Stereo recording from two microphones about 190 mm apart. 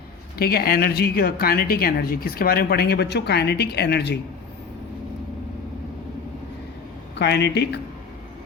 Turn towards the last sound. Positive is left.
turn(degrees=65)  # may be behind; listen again after turning